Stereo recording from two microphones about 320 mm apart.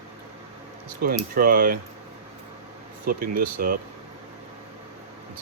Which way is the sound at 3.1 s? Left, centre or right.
Right.